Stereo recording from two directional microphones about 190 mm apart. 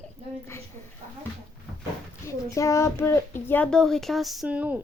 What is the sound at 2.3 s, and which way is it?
Speech, 15° left (ahead or behind).